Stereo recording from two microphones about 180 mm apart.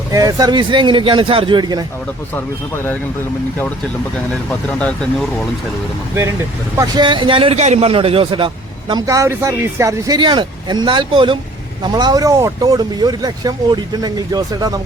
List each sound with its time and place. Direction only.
0.1 s a man's voice: 20° right (ahead or behind)
2.3 s speech: 10° left (ahead or behind)
4.4 s speech: 5° left (ahead or behind)
6.7 s a man's voice: 20° right (ahead or behind)